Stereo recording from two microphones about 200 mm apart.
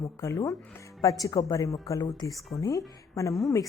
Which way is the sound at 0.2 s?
15° left (ahead or behind).